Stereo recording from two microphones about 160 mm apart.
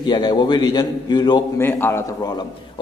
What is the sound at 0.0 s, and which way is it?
A man's voice, 25° left (ahead or behind).